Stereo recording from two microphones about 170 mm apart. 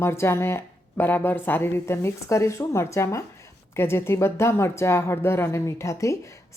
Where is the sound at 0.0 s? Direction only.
15° left (ahead or behind).